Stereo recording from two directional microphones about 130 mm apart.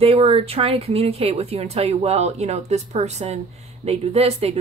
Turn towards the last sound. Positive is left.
turn(degrees=-50)  # may be behind; listen again after turning